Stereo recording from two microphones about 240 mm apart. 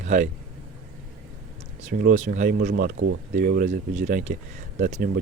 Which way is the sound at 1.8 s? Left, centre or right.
Right.